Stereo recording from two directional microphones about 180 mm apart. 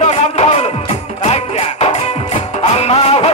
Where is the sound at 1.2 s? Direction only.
35° left (ahead or behind).